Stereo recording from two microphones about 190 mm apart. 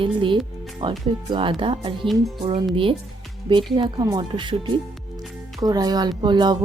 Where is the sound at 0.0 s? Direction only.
25° right (ahead or behind).